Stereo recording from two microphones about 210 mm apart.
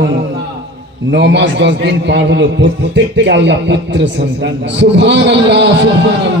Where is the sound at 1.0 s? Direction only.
55° right (ahead or behind).